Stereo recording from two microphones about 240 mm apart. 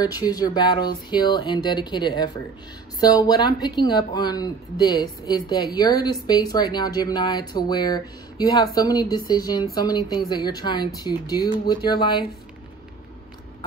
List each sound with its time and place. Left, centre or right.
0.0 s speech: centre